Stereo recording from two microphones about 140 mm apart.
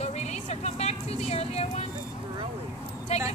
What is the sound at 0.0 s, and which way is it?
Music, 50° left (ahead or behind).